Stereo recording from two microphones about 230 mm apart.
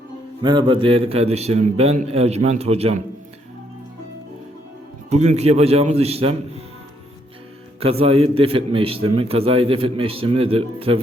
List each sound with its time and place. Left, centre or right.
0.4 s a man's voice: right
5.0 s a man's voice: right
7.8 s a man's voice: right